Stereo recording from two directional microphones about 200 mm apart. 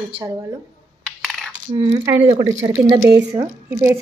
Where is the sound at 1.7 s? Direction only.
25° right (ahead or behind).